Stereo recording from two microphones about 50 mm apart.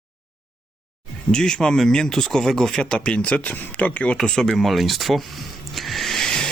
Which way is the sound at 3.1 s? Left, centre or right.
Left.